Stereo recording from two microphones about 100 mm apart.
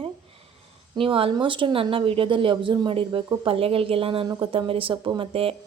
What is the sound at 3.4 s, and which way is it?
Speech, 70° right (ahead or behind).